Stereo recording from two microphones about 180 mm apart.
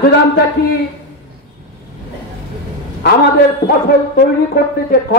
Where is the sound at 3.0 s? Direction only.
70° left (ahead or behind).